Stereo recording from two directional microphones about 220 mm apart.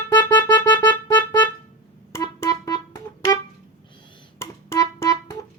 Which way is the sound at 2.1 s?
15° left (ahead or behind).